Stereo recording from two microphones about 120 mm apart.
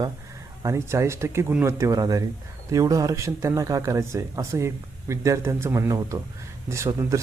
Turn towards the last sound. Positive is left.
turn(degrees=-25)  # may be behind; listen again after turning